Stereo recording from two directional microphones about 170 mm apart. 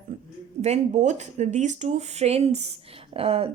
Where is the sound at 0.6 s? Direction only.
40° right (ahead or behind).